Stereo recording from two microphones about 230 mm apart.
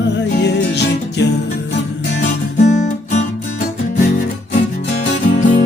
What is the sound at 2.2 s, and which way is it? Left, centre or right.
Guitar, left.